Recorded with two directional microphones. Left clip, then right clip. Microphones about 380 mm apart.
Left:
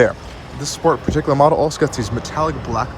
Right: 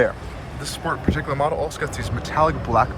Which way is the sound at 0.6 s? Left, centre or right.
Centre.